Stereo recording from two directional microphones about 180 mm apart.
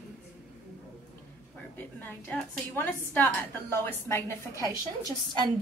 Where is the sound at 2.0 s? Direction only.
10° left (ahead or behind).